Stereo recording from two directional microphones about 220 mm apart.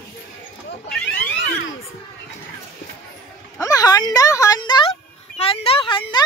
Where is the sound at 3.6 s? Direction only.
15° left (ahead or behind).